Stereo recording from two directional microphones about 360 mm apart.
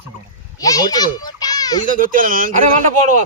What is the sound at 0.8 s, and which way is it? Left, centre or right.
A child's voice, centre.